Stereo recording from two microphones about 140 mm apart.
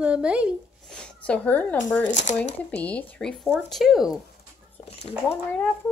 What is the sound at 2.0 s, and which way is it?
Speech, 60° left (ahead or behind).